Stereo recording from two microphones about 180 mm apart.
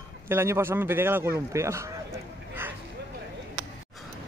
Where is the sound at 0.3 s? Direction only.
15° right (ahead or behind).